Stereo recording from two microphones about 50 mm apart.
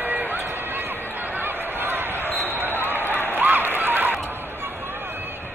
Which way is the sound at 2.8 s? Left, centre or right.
Right.